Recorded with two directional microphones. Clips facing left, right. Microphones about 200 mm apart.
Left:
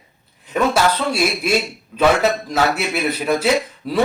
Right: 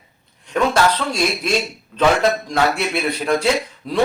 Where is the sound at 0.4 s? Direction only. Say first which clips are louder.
Even; 5° left (ahead or behind).